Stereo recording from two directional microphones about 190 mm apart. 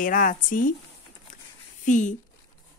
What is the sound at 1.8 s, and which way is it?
Speech, 40° left (ahead or behind).